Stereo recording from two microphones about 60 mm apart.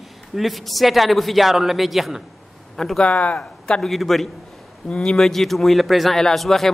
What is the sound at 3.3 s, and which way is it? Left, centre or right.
Speech, centre.